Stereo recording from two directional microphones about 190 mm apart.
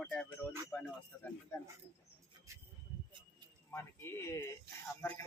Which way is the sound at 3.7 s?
15° left (ahead or behind).